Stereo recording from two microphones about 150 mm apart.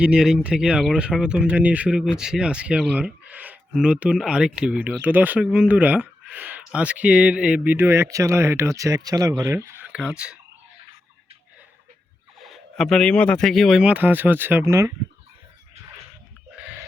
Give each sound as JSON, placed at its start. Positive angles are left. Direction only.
{"t": 0.0, "sound": "speech", "side_deg": -5}
{"t": 12.4, "sound": "speech", "side_deg": 0}
{"t": 16.6, "sound": "a sound", "side_deg": -10}